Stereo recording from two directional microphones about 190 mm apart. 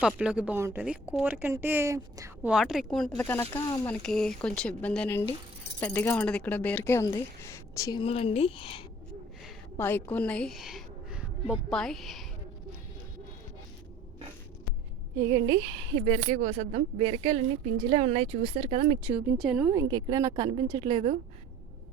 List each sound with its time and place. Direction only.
0.0 s a woman's voice: 5° right (ahead or behind)
2.5 s speech: centre (ahead or behind)
3.3 s speech: 15° left (ahead or behind)
4.0 s speech: centre (ahead or behind); by 8.8 s 25° left (ahead or behind)
9.7 s a woman's voice: 10° left (ahead or behind)
15.3 s a woman's voice: 20° right (ahead or behind)
16.0 s a woman's voice: 35° right (ahead or behind)
18.9 s a woman's voice: 15° right (ahead or behind)
19.7 s a woman's voice: 20° right (ahead or behind)